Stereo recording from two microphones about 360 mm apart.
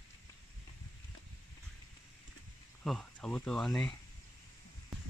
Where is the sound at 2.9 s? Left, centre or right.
Centre.